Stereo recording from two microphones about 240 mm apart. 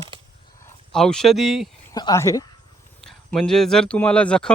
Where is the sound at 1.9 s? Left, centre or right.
Centre.